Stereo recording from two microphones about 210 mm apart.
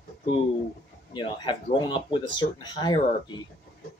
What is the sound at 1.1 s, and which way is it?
Speech, 20° left (ahead or behind).